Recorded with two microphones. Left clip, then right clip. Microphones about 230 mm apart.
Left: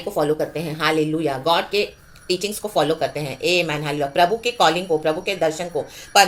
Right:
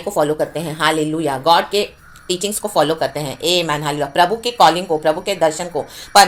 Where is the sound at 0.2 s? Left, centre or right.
Centre.